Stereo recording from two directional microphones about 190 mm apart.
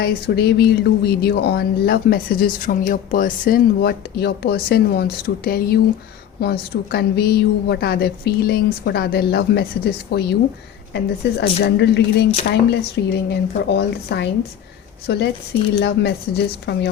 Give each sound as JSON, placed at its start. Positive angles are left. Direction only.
{"t": 0.0, "sound": "speech", "side_deg": 55}
{"t": 13.1, "sound": "speech", "side_deg": 60}